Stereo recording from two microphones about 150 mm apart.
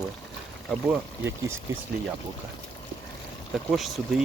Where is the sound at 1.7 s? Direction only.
20° right (ahead or behind).